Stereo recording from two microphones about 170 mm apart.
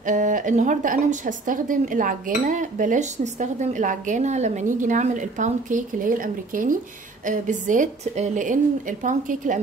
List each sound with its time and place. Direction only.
0.0 s a woman's voice: 50° right (ahead or behind)